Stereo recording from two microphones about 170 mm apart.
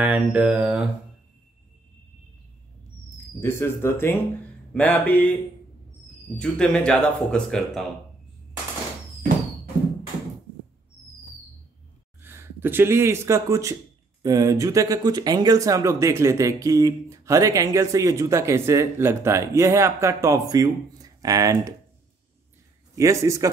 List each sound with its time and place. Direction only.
0.0 s mantra: 10° right (ahead or behind)
3.3 s speech: 15° left (ahead or behind)
6.3 s speech: 5° left (ahead or behind)
12.2 s speech: 10° right (ahead or behind)
22.9 s mantra: 20° right (ahead or behind)